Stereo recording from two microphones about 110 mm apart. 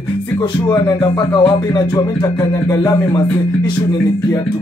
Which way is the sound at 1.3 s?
40° left (ahead or behind).